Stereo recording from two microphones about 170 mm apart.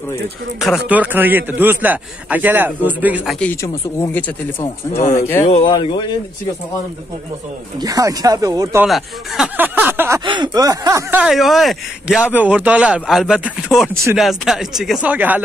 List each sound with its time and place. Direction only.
0.6 s a man's voice: 5° right (ahead or behind)
3.6 s speech: 15° left (ahead or behind)
5.4 s speech: 40° left (ahead or behind)
5.7 s speech: 30° left (ahead or behind)
7.8 s speech: 20° right (ahead or behind)
8.8 s a man's voice: centre (ahead or behind)
10.2 s speech: 25° right (ahead or behind)
11.2 s a man's voice: centre (ahead or behind)